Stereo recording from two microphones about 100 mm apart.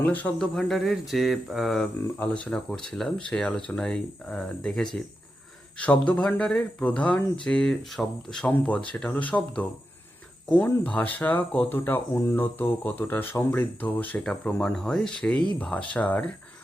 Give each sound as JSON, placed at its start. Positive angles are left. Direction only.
{"t": 0.0, "sound": "speech", "side_deg": 15}
{"t": 0.3, "sound": "speech", "side_deg": 5}
{"t": 2.1, "sound": "speech", "side_deg": 15}